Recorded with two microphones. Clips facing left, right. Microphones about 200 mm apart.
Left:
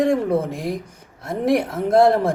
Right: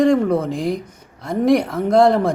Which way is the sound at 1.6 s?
25° left (ahead or behind).